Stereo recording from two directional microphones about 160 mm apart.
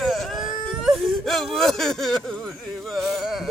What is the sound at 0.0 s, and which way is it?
Whimper, centre (ahead or behind).